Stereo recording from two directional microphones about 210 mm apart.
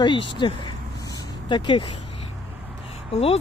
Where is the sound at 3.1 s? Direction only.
25° left (ahead or behind).